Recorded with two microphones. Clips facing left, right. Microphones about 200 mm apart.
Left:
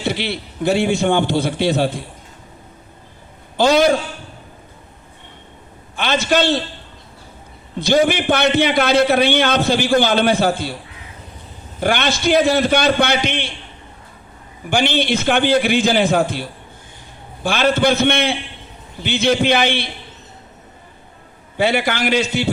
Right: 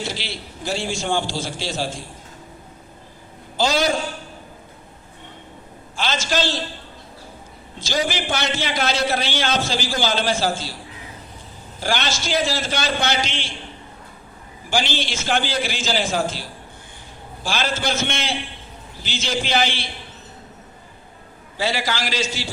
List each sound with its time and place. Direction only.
0.0 s a man's voice: 60° left (ahead or behind)
3.6 s a man's voice: 55° left (ahead or behind)
6.0 s a man's voice: 60° left (ahead or behind)
7.8 s a man's voice: 60° left (ahead or behind)
11.8 s a man's voice: 60° left (ahead or behind)
14.7 s a man's voice: 60° left (ahead or behind)
21.6 s a man's voice: 60° left (ahead or behind)